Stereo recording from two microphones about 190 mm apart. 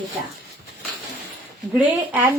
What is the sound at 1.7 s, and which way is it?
Speech, 5° right (ahead or behind).